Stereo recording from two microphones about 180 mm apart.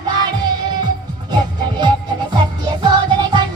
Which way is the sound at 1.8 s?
25° right (ahead or behind).